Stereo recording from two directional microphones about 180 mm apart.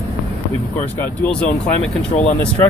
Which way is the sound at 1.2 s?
5° left (ahead or behind).